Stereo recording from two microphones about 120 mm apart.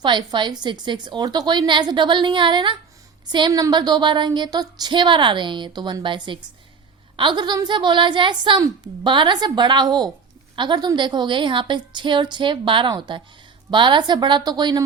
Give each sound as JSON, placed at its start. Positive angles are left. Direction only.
{"t": 0.0, "sound": "speech", "side_deg": -40}